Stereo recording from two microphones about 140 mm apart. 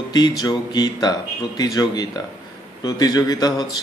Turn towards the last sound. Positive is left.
turn(degrees=30)  # may be behind; listen again after turning